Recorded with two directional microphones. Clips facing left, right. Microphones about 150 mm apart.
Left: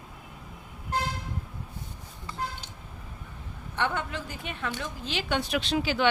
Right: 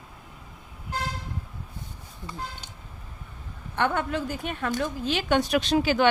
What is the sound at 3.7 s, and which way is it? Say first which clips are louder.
A woman's voice: right 5 dB; 50° right (ahead or behind).